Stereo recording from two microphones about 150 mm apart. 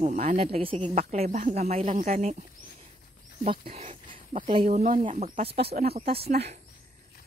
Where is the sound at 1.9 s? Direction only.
60° right (ahead or behind).